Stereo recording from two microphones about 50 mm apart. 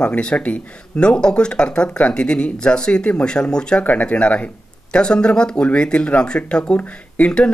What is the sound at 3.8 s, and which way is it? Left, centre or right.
Speech, left.